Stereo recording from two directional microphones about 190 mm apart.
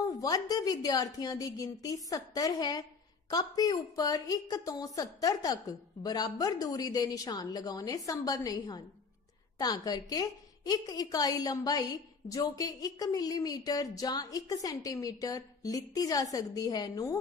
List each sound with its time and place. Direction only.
0.1 s a woman's voice: 20° left (ahead or behind)